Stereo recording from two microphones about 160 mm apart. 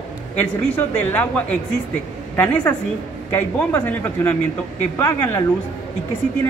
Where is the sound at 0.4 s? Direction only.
10° left (ahead or behind).